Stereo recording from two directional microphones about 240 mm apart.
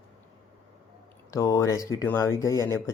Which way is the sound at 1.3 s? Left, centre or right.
Centre.